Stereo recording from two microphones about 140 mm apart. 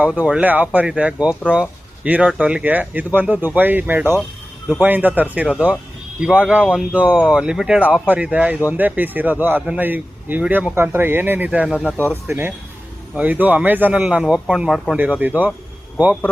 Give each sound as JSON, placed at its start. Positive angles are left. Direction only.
{"t": 0.0, "sound": "speech", "side_deg": -10}
{"t": 12.0, "sound": "speech", "side_deg": -20}